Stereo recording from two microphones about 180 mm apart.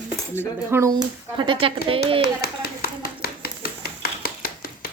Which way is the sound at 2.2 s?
60° left (ahead or behind).